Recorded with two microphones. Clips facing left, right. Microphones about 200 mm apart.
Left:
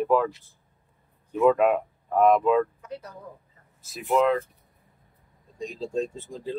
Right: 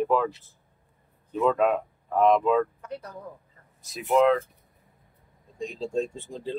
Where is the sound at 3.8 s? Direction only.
5° left (ahead or behind).